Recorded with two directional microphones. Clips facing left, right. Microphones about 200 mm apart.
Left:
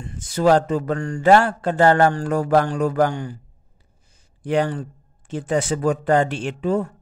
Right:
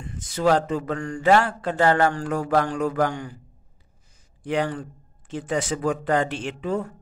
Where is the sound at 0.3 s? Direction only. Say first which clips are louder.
Left 4 dB; 40° left (ahead or behind).